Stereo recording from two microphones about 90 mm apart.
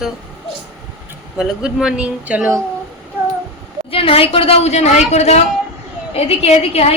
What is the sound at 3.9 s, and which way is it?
Speech, 90° left.